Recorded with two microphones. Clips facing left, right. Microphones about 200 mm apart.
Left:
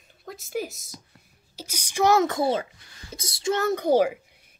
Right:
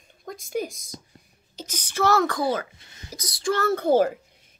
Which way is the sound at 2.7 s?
20° right (ahead or behind).